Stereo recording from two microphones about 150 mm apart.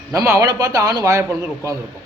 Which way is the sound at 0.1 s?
20° right (ahead or behind).